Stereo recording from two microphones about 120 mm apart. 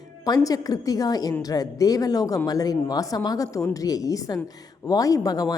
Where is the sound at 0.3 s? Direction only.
30° left (ahead or behind).